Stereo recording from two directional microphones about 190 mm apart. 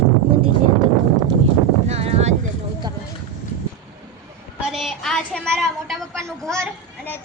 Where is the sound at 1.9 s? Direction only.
35° right (ahead or behind).